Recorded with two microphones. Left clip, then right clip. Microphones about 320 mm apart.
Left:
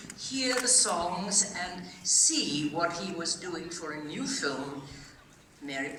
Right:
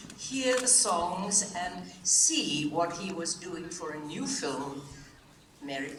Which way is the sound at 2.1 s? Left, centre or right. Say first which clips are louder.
Even; centre.